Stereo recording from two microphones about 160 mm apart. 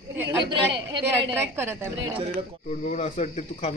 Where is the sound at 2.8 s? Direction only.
50° left (ahead or behind).